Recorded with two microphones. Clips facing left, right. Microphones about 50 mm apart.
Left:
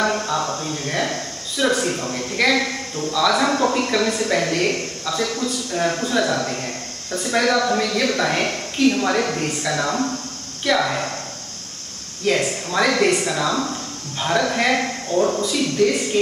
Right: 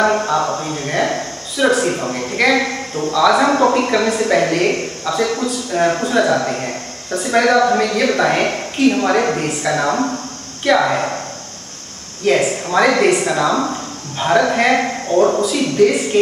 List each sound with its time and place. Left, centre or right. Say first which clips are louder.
0.0 s a man's voice: right 6 dB; centre
12.3 s a man's voice: right 5 dB; centre